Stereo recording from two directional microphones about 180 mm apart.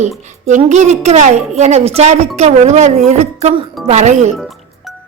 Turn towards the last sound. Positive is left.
turn(degrees=0)  # may be behind; listen again after turning